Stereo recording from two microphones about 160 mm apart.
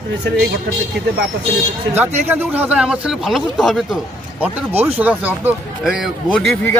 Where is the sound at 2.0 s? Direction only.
10° right (ahead or behind).